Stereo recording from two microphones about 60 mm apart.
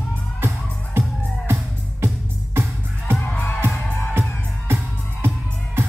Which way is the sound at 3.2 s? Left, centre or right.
Left.